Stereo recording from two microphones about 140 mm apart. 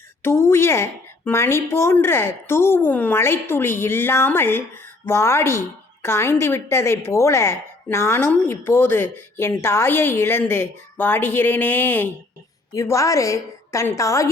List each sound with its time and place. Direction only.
0.2 s a woman's voice: 20° left (ahead or behind)